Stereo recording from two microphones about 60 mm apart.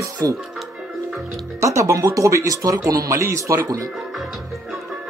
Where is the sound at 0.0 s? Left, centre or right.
Right.